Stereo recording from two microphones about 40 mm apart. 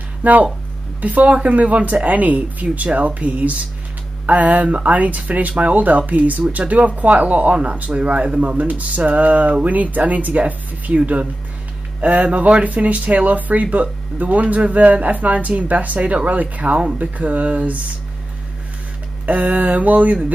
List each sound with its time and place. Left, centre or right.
0.2 s speech: right
12.0 s speech: right
19.2 s speech: right